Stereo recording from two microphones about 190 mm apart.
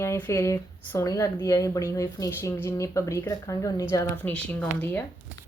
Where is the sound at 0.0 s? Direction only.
15° left (ahead or behind).